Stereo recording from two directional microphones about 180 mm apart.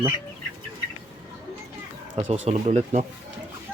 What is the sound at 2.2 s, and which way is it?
Speech, 35° right (ahead or behind).